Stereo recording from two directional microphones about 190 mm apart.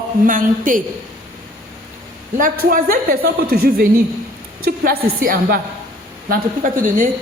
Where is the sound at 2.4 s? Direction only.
50° right (ahead or behind).